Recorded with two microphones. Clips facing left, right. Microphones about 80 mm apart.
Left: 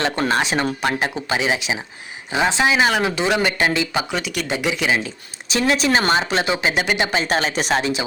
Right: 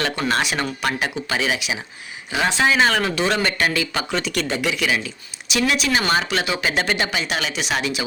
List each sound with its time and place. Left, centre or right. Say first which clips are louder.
0.0 s speech: left 2 dB; left
4.1 s speech: right 1 dB; centre
7.2 s speech: left 4 dB; left